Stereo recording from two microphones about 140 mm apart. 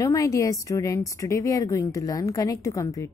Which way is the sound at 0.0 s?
25° left (ahead or behind).